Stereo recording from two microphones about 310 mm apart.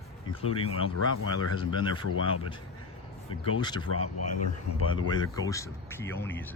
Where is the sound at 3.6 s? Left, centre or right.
Centre.